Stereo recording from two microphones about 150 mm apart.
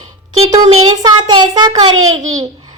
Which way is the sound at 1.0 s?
30° right (ahead or behind).